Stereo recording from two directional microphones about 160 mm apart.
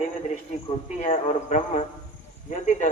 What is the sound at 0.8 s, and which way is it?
Speech, 50° left (ahead or behind).